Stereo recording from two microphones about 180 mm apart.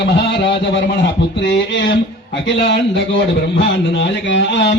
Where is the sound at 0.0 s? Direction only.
75° left (ahead or behind).